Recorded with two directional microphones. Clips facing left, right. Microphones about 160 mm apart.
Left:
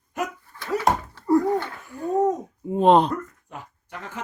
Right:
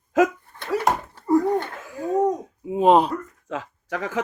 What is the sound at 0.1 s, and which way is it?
Speech, 90° right.